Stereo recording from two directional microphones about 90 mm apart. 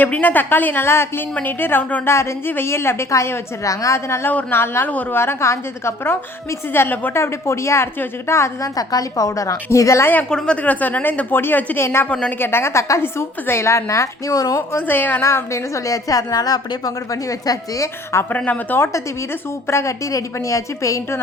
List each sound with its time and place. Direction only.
0.0 s a woman's voice: 20° left (ahead or behind)
5.2 s a woman's voice: 30° left (ahead or behind)
10.2 s a woman's voice: 10° left (ahead or behind); by 12.0 s 25° left (ahead or behind)
12.0 s a woman's voice: 10° left (ahead or behind)
12.4 s a woman's voice: 25° left (ahead or behind)
14.8 s a woman's voice: 20° left (ahead or behind)
18.3 s a woman's voice: 20° left (ahead or behind)
19.6 s a woman's voice: 30° left (ahead or behind)